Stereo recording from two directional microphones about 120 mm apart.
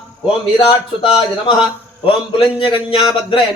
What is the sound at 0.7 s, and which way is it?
A man's voice, 45° left (ahead or behind).